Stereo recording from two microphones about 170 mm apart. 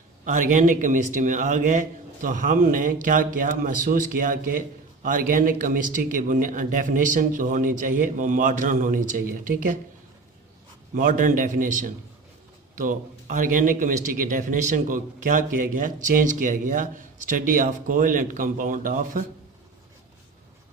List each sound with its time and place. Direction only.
0.3 s a man's voice: 50° right (ahead or behind)
10.9 s a man's voice: 50° right (ahead or behind)